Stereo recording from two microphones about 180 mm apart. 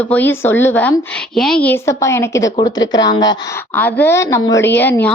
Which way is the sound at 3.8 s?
10° left (ahead or behind).